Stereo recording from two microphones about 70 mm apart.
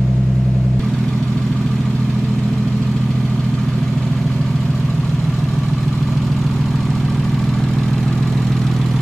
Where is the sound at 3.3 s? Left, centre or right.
Centre.